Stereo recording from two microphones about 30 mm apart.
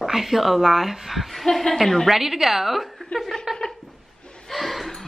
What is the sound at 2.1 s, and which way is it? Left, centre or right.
Speech, centre.